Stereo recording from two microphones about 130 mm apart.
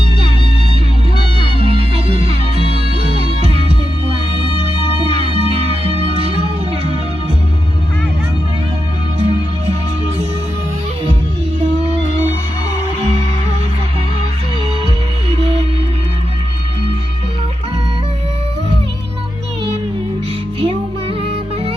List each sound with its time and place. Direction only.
1.2 s music: 45° right (ahead or behind)
4.8 s music: 50° right (ahead or behind)
9.1 s music: 55° right (ahead or behind)
15.4 s music: 55° right (ahead or behind)
20.6 s music: 45° right (ahead or behind)